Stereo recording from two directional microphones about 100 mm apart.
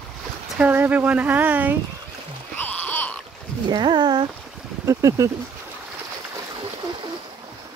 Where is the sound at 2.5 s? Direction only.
15° left (ahead or behind).